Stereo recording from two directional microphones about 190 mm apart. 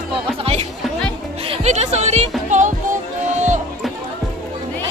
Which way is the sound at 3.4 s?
40° right (ahead or behind).